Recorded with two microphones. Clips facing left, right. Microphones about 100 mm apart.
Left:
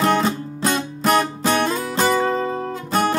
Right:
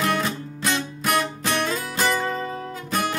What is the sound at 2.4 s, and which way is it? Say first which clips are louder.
Music: left 6 dB; 40° left (ahead or behind).